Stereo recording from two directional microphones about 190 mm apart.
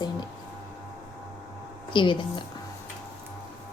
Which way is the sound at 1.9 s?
25° left (ahead or behind).